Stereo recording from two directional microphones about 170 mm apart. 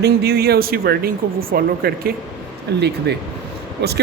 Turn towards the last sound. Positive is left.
turn(degrees=-75)  # may be behind; listen again after turning